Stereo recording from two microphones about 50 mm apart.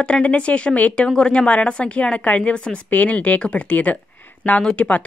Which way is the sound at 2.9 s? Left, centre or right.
Left.